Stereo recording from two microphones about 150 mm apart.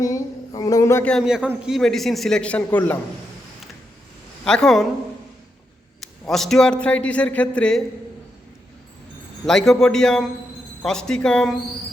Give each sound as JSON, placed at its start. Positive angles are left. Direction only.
{"t": 0.0, "sound": "a sound", "side_deg": 25}
{"t": 1.0, "sound": "a man's voice", "side_deg": 0}
{"t": 4.4, "sound": "a man's voice", "side_deg": 5}
{"t": 6.0, "sound": "a man's voice", "side_deg": 0}
{"t": 9.5, "sound": "a man's voice", "side_deg": 5}